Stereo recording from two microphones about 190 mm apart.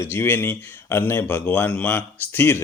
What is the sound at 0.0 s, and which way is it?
Speech, 10° left (ahead or behind).